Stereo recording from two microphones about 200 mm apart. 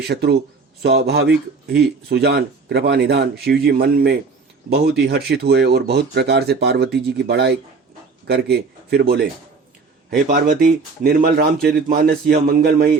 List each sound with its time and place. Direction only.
0.1 s speech: 55° right (ahead or behind)
11.0 s speech: 50° right (ahead or behind)